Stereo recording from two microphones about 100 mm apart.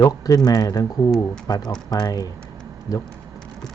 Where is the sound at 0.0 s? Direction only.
40° left (ahead or behind).